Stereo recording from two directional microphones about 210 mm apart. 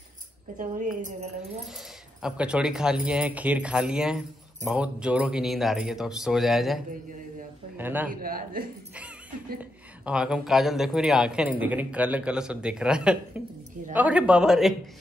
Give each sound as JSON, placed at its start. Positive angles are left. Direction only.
{"t": 0.6, "sound": "speech", "side_deg": -40}
{"t": 2.2, "sound": "a man's voice", "side_deg": -5}
{"t": 8.1, "sound": "speech", "side_deg": -45}
{"t": 9.6, "sound": "speech", "side_deg": -5}